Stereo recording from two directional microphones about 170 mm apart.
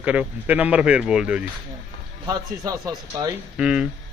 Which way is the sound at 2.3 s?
20° right (ahead or behind).